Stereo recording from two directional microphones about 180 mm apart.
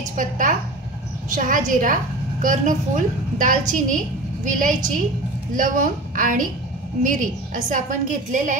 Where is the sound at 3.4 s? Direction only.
45° right (ahead or behind).